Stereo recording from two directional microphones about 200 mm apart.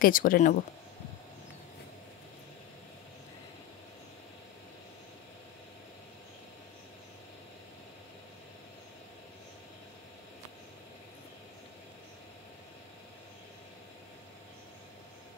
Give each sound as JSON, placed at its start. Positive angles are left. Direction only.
{"t": 0.0, "sound": "speech", "side_deg": 45}